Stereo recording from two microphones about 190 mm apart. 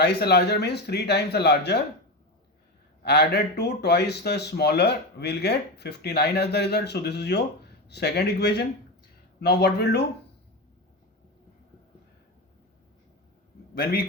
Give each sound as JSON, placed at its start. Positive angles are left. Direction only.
{"t": 0.0, "sound": "speech", "side_deg": 60}
{"t": 3.0, "sound": "speech", "side_deg": 60}